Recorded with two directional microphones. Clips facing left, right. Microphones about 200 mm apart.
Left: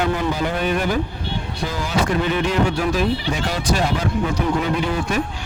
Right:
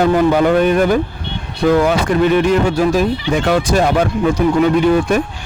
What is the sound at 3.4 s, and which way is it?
Speech, 55° right (ahead or behind).